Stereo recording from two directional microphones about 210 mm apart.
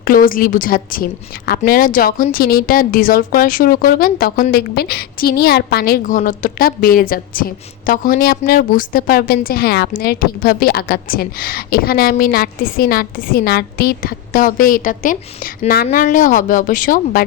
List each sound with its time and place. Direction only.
0.0 s a woman's voice: 40° left (ahead or behind)